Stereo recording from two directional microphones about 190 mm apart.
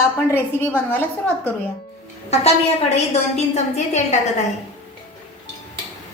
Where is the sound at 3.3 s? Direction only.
35° left (ahead or behind).